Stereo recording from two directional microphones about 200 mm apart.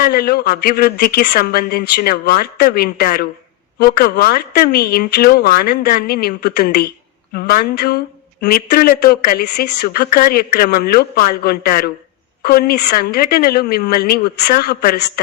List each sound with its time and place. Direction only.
0.0 s speech: 50° left (ahead or behind)